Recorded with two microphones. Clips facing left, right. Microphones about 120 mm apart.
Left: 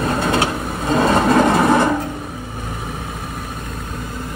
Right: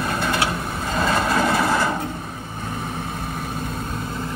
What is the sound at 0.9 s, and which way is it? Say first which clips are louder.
Vehicle: left 7 dB; 55° left (ahead or behind).